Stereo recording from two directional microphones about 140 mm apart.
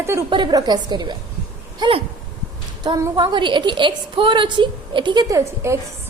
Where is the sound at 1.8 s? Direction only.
40° right (ahead or behind).